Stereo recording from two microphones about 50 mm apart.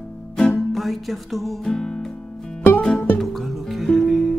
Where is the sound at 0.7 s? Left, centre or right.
Centre.